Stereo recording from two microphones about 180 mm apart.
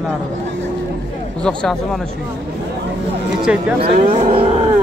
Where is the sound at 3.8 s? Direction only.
35° right (ahead or behind).